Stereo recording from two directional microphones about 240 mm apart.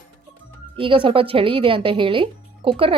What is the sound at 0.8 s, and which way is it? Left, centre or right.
Speech, right.